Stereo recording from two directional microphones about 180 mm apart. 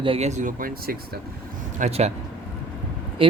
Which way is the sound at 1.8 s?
35° right (ahead or behind).